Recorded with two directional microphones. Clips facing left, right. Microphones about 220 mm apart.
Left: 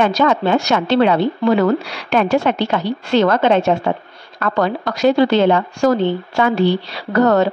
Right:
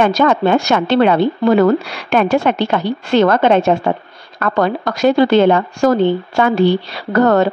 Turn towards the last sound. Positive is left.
turn(degrees=-55)  # may be behind; listen again after turning